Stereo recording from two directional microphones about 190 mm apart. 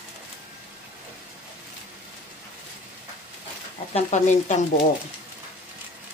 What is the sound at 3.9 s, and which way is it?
Speech, 35° left (ahead or behind).